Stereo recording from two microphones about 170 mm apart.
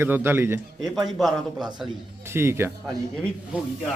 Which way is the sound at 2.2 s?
15° right (ahead or behind).